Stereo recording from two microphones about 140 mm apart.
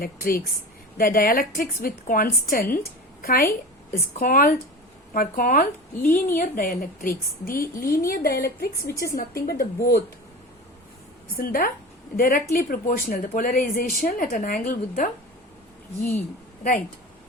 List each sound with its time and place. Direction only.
0.0 s a woman's voice: 90° left
3.9 s speech: 75° left (ahead or behind)
6.1 s a woman's voice: 15° left (ahead or behind)
6.3 s a woman's voice: 80° left
11.3 s a woman's voice: 90° left; by 15.1 s 75° left (ahead or behind)